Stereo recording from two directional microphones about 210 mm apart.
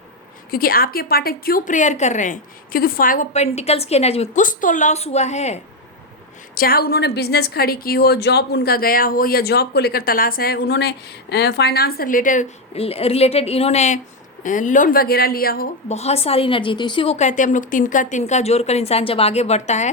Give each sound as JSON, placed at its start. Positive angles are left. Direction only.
{"t": 0.5, "sound": "a woman's voice", "side_deg": 45}
{"t": 6.5, "sound": "a woman's voice", "side_deg": 45}
{"t": 15.9, "sound": "a woman's voice", "side_deg": 30}